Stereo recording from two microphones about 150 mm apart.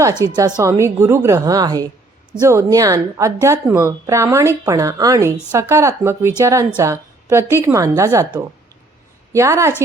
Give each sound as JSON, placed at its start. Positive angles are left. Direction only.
{"t": 0.3, "sound": "speech", "side_deg": -25}
{"t": 9.3, "sound": "a woman's voice", "side_deg": -20}